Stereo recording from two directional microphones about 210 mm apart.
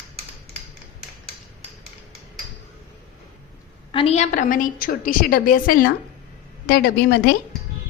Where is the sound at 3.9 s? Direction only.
30° left (ahead or behind); by 7.3 s 50° left (ahead or behind).